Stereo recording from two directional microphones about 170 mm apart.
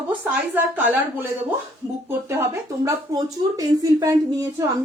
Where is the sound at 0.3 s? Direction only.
10° right (ahead or behind).